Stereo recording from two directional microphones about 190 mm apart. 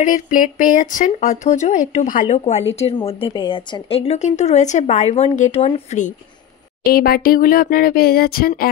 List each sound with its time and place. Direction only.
0.0 s a woman's voice: 45° left (ahead or behind)
6.8 s speech: 55° left (ahead or behind)